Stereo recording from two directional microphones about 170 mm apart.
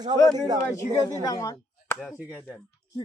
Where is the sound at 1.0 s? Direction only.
20° left (ahead or behind).